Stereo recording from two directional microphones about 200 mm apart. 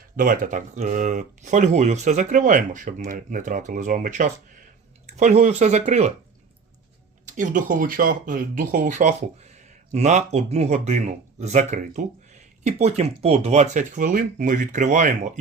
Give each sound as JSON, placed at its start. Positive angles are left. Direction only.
{"t": 0.2, "sound": "speech", "side_deg": -40}
{"t": 7.3, "sound": "speech", "side_deg": -40}